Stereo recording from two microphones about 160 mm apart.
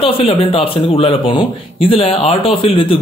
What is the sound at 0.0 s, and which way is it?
Speech, 35° left (ahead or behind).